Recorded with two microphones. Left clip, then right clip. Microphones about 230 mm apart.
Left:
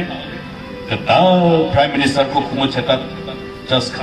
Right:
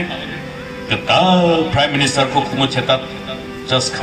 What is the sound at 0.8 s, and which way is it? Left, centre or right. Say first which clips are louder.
A man's voice: left 1 dB; left.